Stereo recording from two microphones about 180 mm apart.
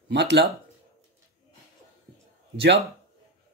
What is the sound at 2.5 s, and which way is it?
Speech, 70° right (ahead or behind).